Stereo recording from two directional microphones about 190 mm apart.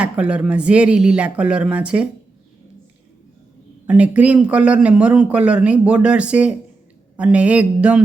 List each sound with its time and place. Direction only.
0.0 s speech: 5° right (ahead or behind)
3.8 s speech: 5° right (ahead or behind)